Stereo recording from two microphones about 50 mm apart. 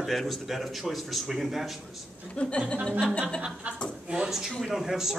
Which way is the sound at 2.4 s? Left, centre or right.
Left.